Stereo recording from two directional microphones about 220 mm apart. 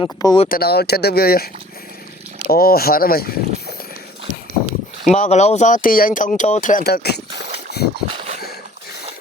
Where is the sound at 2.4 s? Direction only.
45° left (ahead or behind).